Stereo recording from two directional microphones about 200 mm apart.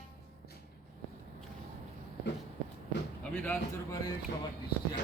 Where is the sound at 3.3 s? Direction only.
10° left (ahead or behind).